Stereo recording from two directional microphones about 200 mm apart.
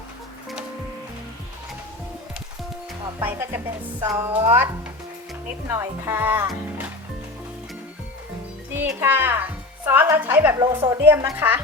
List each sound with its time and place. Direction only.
3.2 s speech: 10° right (ahead or behind)
8.7 s speech: 10° right (ahead or behind)
10.6 s a woman's voice: 20° right (ahead or behind)
11.3 s speech: 10° right (ahead or behind)